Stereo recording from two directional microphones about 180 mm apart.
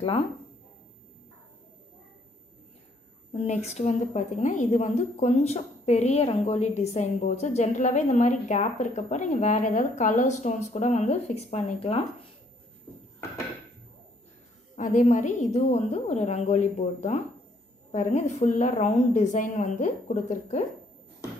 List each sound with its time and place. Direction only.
3.3 s a woman's voice: 40° left (ahead or behind)
12.9 s dishes: 10° left (ahead or behind)
14.8 s a woman's voice: 45° left (ahead or behind)